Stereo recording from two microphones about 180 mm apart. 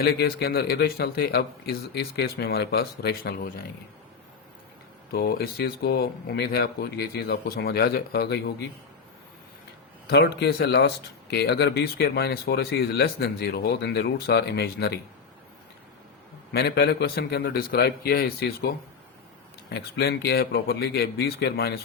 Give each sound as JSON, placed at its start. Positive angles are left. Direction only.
{"t": 0.0, "sound": "speech", "side_deg": 60}
{"t": 5.1, "sound": "speech", "side_deg": 55}
{"t": 10.1, "sound": "speech", "side_deg": 65}
{"t": 16.5, "sound": "speech", "side_deg": 65}
{"t": 19.7, "sound": "speech", "side_deg": 65}